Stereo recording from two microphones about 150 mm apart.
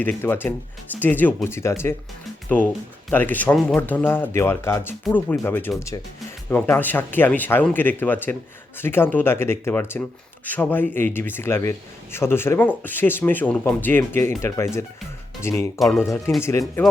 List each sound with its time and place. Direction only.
0.2 s speech: 15° left (ahead or behind)
3.1 s speech: 10° left (ahead or behind)